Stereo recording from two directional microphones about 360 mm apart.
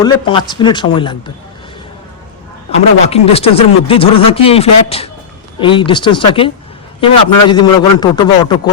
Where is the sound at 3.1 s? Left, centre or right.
Centre.